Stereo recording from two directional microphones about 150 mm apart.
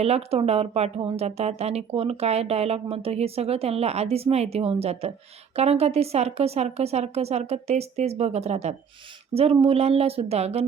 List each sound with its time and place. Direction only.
0.0 s speech: 45° right (ahead or behind)